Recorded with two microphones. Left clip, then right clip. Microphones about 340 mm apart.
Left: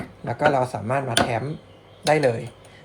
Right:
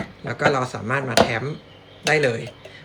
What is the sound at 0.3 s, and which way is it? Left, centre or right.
Speech, centre.